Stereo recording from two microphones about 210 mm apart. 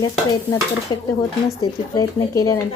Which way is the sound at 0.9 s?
20° left (ahead or behind).